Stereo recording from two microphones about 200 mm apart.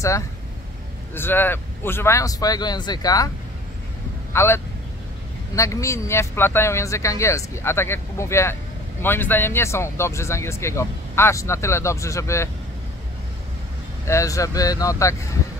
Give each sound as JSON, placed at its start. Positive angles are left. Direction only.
{"t": 1.1, "sound": "speech", "side_deg": 10}
{"t": 4.3, "sound": "speech", "side_deg": 15}
{"t": 5.6, "sound": "speech", "side_deg": 15}
{"t": 14.0, "sound": "speech", "side_deg": 15}